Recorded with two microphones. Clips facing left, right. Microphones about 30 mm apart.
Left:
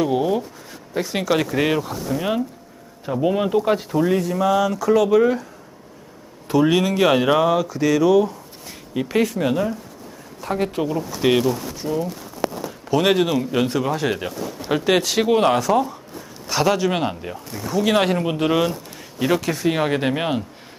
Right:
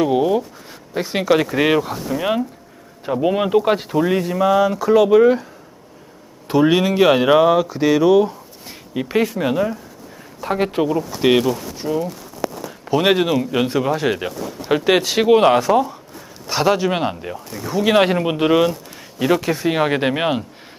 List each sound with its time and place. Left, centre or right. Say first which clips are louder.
0.0 s speech: right 3 dB; centre
0.9 s speech: right 4 dB; centre
6.5 s speech: right 2 dB; centre
10.4 s speech: right 4 dB; right
10.8 s speech: right 2 dB; centre